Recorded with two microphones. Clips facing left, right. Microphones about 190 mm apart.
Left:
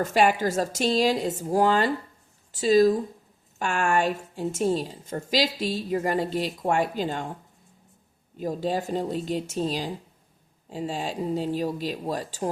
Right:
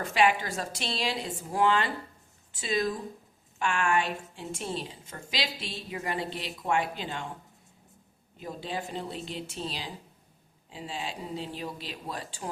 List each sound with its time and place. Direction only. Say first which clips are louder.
0.0 s a woman's voice: left 4 dB; 40° left (ahead or behind)
8.4 s a woman's voice: left 9 dB; 45° left (ahead or behind)